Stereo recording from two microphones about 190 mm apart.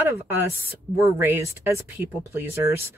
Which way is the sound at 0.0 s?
15° right (ahead or behind).